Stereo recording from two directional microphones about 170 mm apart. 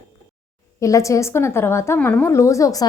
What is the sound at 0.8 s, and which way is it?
A woman's voice, 20° left (ahead or behind).